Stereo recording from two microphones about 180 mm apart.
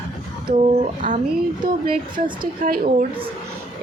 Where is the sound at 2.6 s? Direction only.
55° right (ahead or behind).